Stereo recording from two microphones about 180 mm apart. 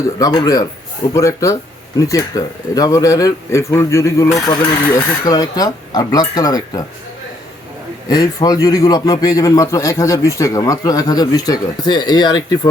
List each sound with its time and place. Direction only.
0.2 s a man's voice: 20° left (ahead or behind)
8.1 s a man's voice: 20° left (ahead or behind)